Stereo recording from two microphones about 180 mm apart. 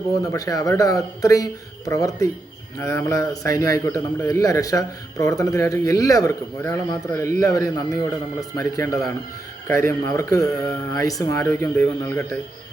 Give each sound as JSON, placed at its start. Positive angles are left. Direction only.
{"t": 0.3, "sound": "a man's voice", "side_deg": 20}